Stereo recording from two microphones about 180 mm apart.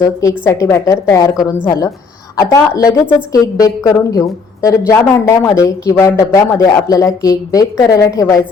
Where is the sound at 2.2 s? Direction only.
20° left (ahead or behind).